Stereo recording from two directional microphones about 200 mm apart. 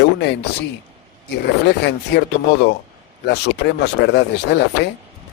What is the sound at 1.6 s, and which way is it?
Speech, 60° left (ahead or behind).